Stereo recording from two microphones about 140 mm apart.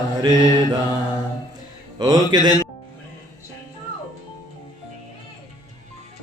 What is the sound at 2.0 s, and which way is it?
Mantra, 25° right (ahead or behind).